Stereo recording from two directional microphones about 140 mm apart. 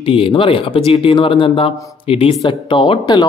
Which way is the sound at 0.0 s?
40° left (ahead or behind).